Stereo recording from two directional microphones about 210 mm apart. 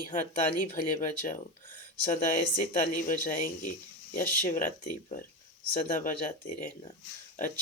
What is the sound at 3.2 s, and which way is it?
Speech, 40° left (ahead or behind).